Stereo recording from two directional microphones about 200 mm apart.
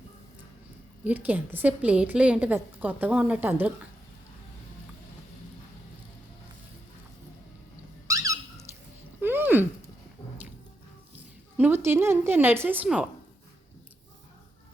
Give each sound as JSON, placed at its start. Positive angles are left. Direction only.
{"t": 1.0, "sound": "a woman's voice", "side_deg": -10}
{"t": 8.0, "sound": "a sound", "side_deg": -15}
{"t": 11.5, "sound": "a woman's voice", "side_deg": -10}